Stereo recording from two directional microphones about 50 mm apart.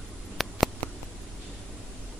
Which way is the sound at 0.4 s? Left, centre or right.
Centre.